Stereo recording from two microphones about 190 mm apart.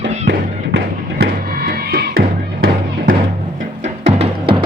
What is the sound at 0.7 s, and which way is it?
Music, 55° right (ahead or behind).